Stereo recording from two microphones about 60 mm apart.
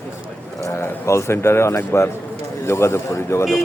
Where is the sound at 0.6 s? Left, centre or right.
Left.